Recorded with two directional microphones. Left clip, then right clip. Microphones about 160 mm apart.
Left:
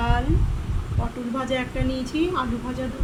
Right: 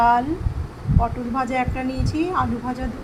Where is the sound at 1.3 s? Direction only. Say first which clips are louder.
Right 1 dB; 10° right (ahead or behind).